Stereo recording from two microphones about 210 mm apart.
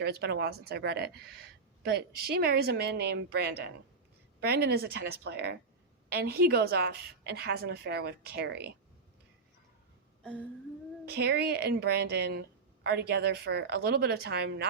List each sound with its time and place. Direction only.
0.0 s a woman's voice: 50° right (ahead or behind)
11.1 s a woman's voice: 50° right (ahead or behind)